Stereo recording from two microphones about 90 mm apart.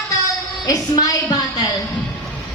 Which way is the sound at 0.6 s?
40° left (ahead or behind).